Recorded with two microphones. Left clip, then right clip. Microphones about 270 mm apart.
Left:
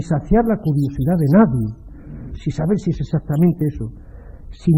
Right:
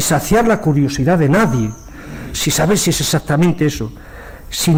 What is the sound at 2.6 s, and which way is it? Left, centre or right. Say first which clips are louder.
Speech: right 6 dB; centre.